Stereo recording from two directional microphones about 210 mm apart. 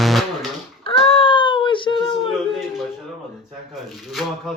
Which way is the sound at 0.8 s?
25° left (ahead or behind).